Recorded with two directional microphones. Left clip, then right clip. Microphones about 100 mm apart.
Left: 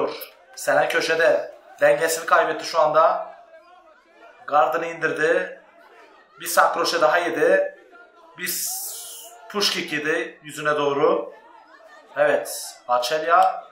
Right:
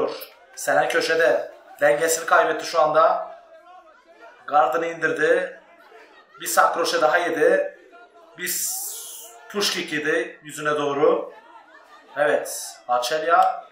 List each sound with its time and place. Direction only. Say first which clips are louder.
0.7 s speech: even; 30° left (ahead or behind)
4.5 s speech: even; 25° left (ahead or behind)
9.5 s speech: left 1 dB; 30° left (ahead or behind)